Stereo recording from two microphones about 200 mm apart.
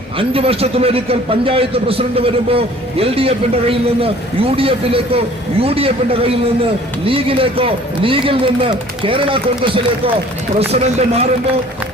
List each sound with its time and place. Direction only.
0.2 s a man's voice: 30° right (ahead or behind)